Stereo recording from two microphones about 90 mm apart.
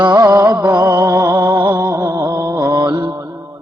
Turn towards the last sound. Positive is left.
turn(degrees=-40)  # may be behind; listen again after turning